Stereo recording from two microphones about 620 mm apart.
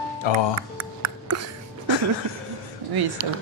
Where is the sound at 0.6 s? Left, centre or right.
Right.